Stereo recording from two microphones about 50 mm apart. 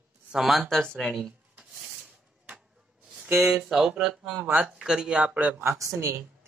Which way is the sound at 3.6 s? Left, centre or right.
Centre.